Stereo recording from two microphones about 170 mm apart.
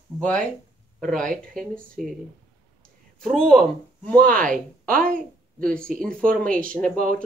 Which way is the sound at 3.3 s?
5° left (ahead or behind).